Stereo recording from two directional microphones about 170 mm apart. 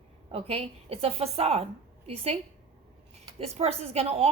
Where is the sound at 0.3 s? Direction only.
35° right (ahead or behind).